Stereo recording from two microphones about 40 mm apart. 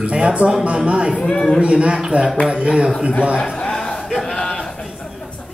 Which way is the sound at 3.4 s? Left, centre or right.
Centre.